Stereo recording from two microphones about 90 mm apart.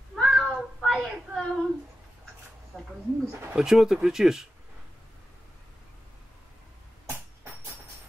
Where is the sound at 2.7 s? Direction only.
10° right (ahead or behind).